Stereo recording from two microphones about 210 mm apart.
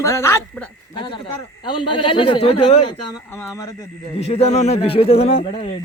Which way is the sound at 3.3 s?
15° left (ahead or behind).